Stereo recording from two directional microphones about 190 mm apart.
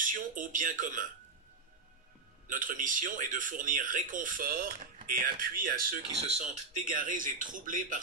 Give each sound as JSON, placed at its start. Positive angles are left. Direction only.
{"t": 0.0, "sound": "speech", "side_deg": -45}
{"t": 2.4, "sound": "speech", "side_deg": -45}
{"t": 6.1, "sound": "speech", "side_deg": -35}
{"t": 6.9, "sound": "speech", "side_deg": -45}